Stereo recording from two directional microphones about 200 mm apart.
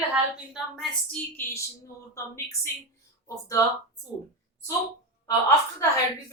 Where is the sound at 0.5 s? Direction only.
5° left (ahead or behind).